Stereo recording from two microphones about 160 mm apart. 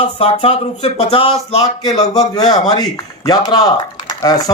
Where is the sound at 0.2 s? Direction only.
35° left (ahead or behind).